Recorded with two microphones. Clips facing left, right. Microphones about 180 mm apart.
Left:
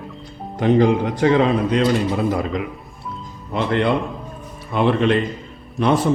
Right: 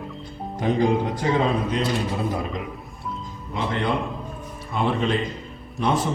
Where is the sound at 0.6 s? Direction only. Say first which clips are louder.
Left 5 dB; 70° left (ahead or behind).